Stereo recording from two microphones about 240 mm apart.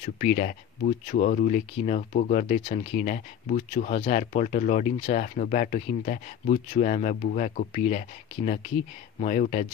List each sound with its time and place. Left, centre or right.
0.0 s speech: left
9.2 s speech: left